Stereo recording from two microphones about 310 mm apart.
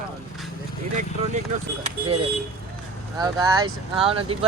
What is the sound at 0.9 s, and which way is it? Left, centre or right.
A man's voice, right.